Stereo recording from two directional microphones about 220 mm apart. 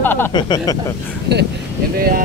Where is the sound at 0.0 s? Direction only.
10° left (ahead or behind).